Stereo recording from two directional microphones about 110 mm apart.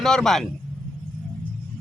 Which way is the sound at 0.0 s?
5° left (ahead or behind).